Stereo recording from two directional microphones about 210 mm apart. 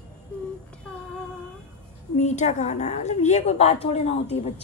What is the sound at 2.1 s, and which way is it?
A woman's voice, 35° left (ahead or behind).